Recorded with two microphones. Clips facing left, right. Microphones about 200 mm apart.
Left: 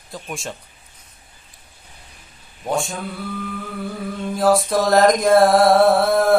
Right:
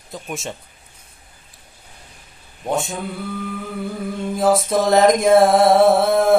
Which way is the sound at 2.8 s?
Centre (ahead or behind).